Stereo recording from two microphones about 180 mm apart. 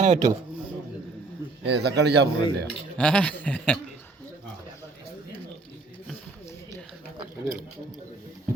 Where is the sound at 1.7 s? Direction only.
70° right (ahead or behind).